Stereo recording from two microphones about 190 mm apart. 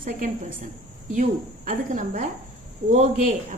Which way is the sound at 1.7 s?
45° right (ahead or behind).